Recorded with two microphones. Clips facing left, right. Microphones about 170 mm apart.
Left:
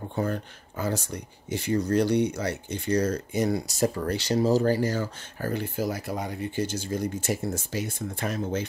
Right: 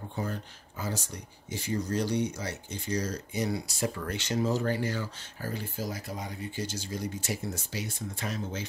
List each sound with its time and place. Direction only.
0.1 s speech: 60° left (ahead or behind); by 5.1 s 40° left (ahead or behind)
5.4 s speech: 60° left (ahead or behind)